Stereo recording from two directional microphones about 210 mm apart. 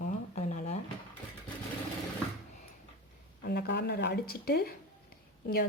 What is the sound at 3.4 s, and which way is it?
Speech, 50° left (ahead or behind).